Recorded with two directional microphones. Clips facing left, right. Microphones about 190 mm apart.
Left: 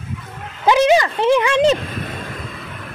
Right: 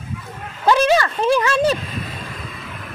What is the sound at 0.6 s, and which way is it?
Speech, 15° left (ahead or behind).